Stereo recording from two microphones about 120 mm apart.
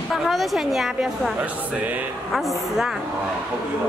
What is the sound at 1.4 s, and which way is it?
Speech, 15° right (ahead or behind).